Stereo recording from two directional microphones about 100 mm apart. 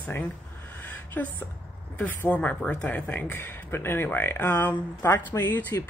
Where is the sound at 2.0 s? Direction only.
15° left (ahead or behind).